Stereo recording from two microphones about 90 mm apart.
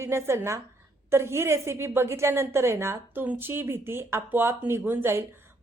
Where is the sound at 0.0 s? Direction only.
30° right (ahead or behind).